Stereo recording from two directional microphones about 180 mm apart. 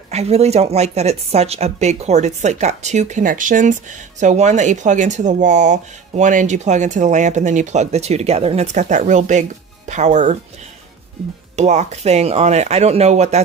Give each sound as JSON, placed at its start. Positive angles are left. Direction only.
{"t": 0.1, "sound": "speech", "side_deg": -35}
{"t": 11.5, "sound": "speech", "side_deg": -40}